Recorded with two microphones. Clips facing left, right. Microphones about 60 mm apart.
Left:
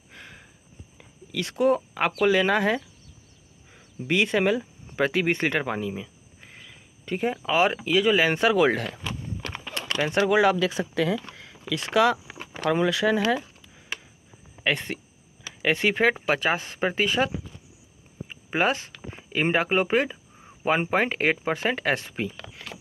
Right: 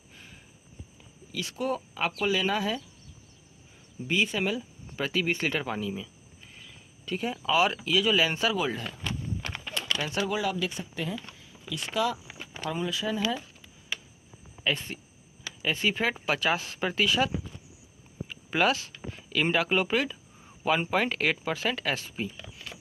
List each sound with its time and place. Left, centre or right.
0.1 s a sound: left
0.9 s speech: left
8.3 s speech: left
10.0 s speech: left
10.4 s speech: left
11.7 s speech: left
14.6 s speech: left
18.3 s speech: left
22.5 s a sound: left